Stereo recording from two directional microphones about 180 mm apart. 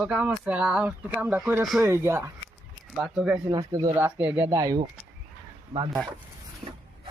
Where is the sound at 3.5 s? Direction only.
20° right (ahead or behind).